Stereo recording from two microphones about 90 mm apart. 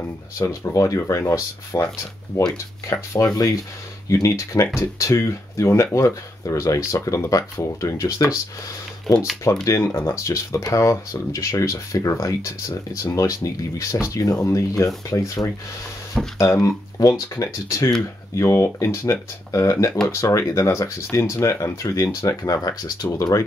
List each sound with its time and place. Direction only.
0.4 s speech: 35° left (ahead or behind)
9.1 s speech: 5° left (ahead or behind)
9.4 s speech: 35° left (ahead or behind)